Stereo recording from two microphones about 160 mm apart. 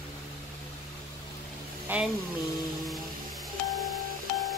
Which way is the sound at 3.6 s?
Centre (ahead or behind).